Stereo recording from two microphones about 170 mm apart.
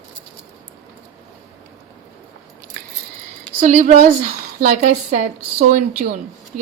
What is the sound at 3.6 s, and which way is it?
Speech, 45° right (ahead or behind).